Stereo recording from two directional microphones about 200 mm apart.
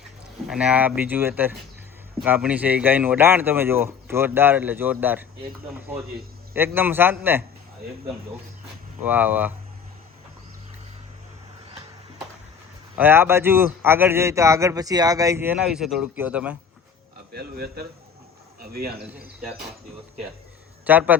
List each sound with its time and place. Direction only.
0.4 s speech: 5° right (ahead or behind)
6.5 s speech: 10° right (ahead or behind)
9.0 s speech: 10° right (ahead or behind)
13.0 s speech: 10° right (ahead or behind)
17.3 s a man's voice: 50° right (ahead or behind)
18.9 s speech: 5° right (ahead or behind)
20.8 s speech: 10° right (ahead or behind)